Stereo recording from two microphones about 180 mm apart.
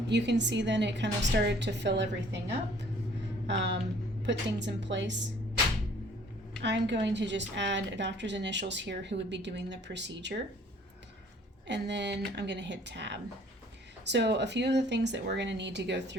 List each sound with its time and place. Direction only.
0.1 s a woman's voice: 75° right (ahead or behind)
3.4 s a sound: 80° right
4.3 s a woman's voice: 80° right
6.6 s a woman's voice: 75° right (ahead or behind)
11.7 s a woman's voice: 75° right (ahead or behind)